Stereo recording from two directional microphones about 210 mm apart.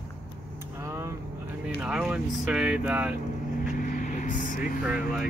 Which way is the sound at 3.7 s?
40° left (ahead or behind).